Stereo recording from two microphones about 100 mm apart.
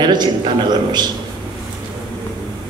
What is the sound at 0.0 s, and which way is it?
A man's voice, 45° right (ahead or behind).